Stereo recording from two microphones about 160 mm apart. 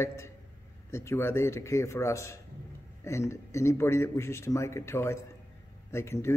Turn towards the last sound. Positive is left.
turn(degrees=15)  # may be behind; listen again after turning